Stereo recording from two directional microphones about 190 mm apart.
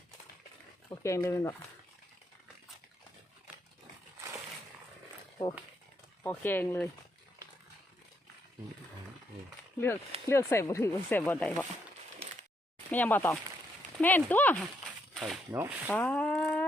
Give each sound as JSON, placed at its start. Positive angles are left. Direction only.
{"t": 0.9, "sound": "speech", "side_deg": 15}
{"t": 6.2, "sound": "speech", "side_deg": 10}
{"t": 9.7, "sound": "speech", "side_deg": 15}
{"t": 12.9, "sound": "speech", "side_deg": 10}
{"t": 14.8, "sound": "speech", "side_deg": -5}
{"t": 15.9, "sound": "a sound", "side_deg": 10}